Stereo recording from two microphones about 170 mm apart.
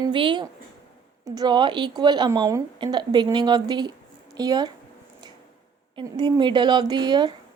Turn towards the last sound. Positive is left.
turn(degrees=-25)  # may be behind; listen again after turning